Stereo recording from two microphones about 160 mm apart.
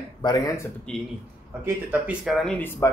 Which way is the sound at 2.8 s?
20° left (ahead or behind).